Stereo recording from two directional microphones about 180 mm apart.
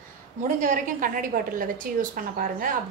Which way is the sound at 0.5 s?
45° right (ahead or behind).